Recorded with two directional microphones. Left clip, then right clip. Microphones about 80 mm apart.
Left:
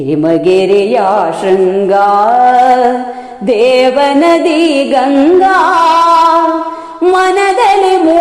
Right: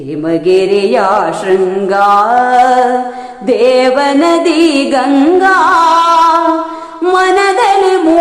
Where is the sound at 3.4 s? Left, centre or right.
Left.